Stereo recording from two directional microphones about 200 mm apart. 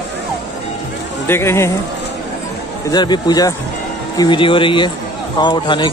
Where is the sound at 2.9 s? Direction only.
20° left (ahead or behind).